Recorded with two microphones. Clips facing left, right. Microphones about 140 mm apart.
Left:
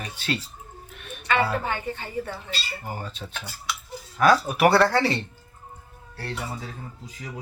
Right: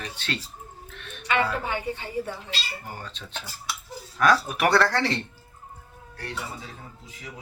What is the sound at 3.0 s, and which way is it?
A man's voice, 10° left (ahead or behind).